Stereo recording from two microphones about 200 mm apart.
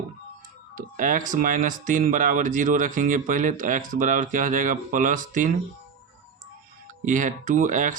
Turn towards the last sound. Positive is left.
turn(degrees=-40)  # may be behind; listen again after turning